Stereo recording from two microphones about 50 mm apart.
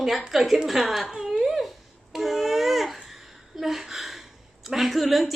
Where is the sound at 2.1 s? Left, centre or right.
Centre.